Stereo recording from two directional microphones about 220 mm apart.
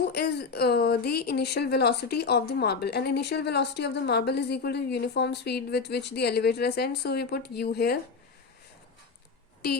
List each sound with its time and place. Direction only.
0.1 s a woman's voice: 45° left (ahead or behind)